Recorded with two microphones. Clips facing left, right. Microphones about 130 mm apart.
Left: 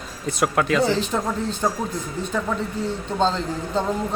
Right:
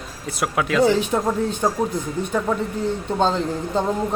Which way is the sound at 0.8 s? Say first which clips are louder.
Right 4 dB; 15° right (ahead or behind).